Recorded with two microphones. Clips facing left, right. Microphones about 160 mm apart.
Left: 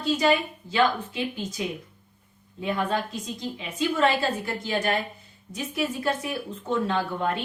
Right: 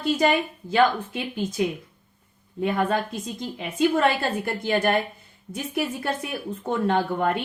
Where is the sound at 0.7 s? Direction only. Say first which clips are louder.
Right 3 dB; 55° right (ahead or behind).